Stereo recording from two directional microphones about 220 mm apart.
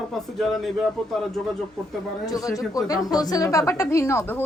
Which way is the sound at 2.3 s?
15° left (ahead or behind).